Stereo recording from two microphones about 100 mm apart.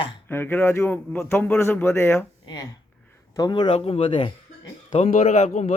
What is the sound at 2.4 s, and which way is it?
Speech, 45° left (ahead or behind).